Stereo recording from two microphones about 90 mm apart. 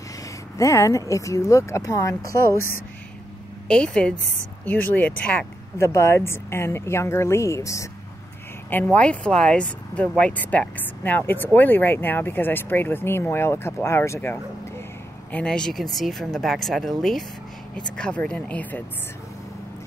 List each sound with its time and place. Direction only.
0.6 s speech: 35° left (ahead or behind)
3.6 s speech: 10° left (ahead or behind)
5.8 s speech: 30° left (ahead or behind)
8.9 s speech: 15° left (ahead or behind); by 14.4 s 30° left (ahead or behind)
15.3 s speech: 10° left (ahead or behind)